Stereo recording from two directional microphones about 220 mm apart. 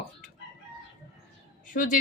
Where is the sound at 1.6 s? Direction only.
35° left (ahead or behind).